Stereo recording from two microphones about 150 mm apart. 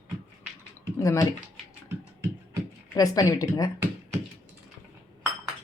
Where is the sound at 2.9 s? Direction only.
25° left (ahead or behind).